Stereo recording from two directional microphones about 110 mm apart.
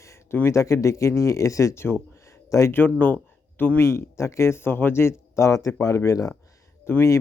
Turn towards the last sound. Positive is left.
turn(degrees=20)  # may be behind; listen again after turning